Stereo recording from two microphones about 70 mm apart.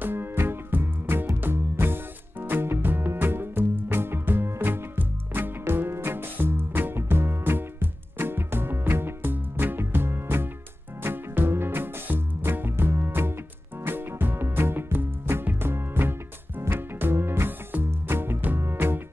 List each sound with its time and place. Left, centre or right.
0.0 s music: right